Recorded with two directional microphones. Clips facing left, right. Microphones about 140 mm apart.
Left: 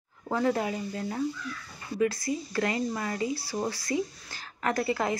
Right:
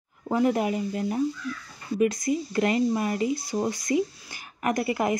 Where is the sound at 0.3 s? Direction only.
15° right (ahead or behind).